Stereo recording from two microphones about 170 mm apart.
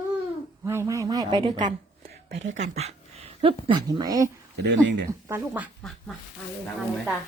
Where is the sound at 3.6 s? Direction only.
25° right (ahead or behind).